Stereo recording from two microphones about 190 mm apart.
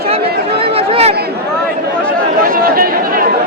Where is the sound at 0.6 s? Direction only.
30° right (ahead or behind).